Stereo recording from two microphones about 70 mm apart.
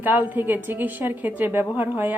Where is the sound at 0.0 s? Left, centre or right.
Right.